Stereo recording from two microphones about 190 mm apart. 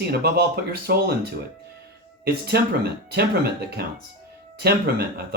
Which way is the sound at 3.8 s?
55° right (ahead or behind).